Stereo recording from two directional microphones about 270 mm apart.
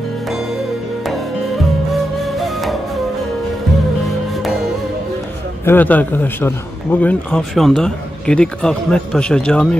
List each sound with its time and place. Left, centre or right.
1.9 s music: centre
5.7 s a man's voice: centre